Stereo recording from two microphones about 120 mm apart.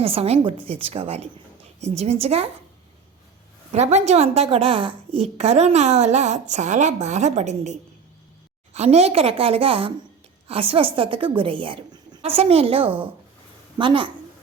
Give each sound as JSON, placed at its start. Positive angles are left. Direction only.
{"t": 0.0, "sound": "a woman's voice", "side_deg": -55}
{"t": 3.7, "sound": "a woman's voice", "side_deg": -70}